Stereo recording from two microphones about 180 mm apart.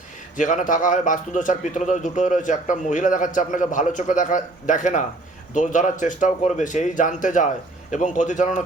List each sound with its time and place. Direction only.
0.3 s a man's voice: 45° left (ahead or behind)